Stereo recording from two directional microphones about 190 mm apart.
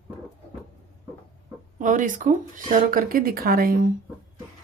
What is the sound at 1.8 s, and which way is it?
Speech, 45° right (ahead or behind).